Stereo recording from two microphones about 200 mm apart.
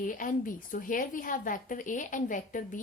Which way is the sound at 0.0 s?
45° left (ahead or behind).